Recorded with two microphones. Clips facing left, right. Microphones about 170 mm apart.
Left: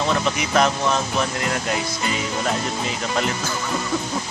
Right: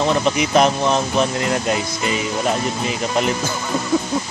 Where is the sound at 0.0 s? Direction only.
20° right (ahead or behind).